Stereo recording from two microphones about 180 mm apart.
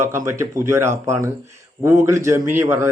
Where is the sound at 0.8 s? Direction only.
40° right (ahead or behind).